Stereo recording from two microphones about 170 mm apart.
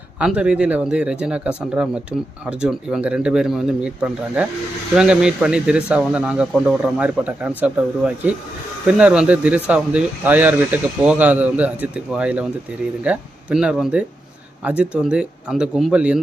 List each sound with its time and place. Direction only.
0.2 s speech: 5° right (ahead or behind)